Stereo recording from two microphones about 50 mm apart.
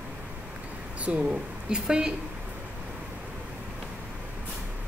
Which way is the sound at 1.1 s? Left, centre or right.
Right.